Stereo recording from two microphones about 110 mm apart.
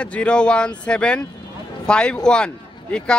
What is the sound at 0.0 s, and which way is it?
Speech, 10° left (ahead or behind).